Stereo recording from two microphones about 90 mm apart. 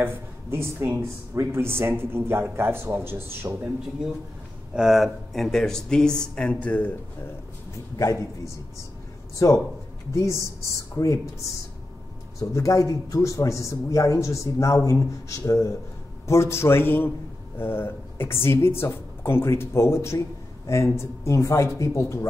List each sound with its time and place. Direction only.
0.0 s speech: 25° right (ahead or behind)
4.7 s speech: 5° right (ahead or behind); by 7.0 s 20° left (ahead or behind)
10.1 s speech: 35° left (ahead or behind)
12.4 s speech: 35° left (ahead or behind)